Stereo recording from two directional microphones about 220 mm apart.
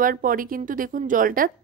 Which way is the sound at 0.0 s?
40° right (ahead or behind).